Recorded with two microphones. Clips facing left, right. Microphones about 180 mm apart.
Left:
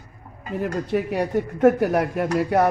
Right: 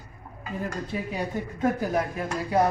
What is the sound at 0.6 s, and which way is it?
Speech, 70° left (ahead or behind).